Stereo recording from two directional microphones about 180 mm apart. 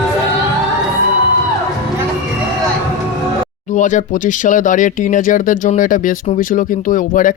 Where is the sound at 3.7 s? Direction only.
45° left (ahead or behind).